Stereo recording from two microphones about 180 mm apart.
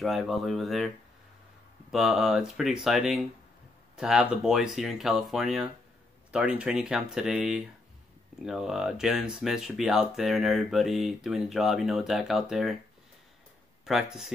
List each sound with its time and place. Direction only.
0.0 s speech: centre (ahead or behind)
13.8 s speech: centre (ahead or behind)